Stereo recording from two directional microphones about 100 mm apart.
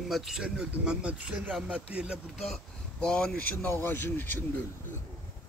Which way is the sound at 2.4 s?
5° left (ahead or behind).